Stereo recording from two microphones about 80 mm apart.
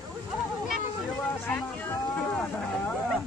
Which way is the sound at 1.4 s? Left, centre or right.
Left.